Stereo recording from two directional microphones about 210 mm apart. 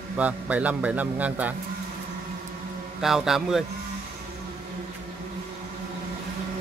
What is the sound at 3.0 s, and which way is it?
Speech, centre (ahead or behind).